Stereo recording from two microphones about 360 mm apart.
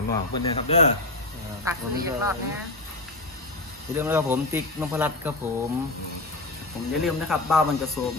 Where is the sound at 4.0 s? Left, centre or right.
Centre.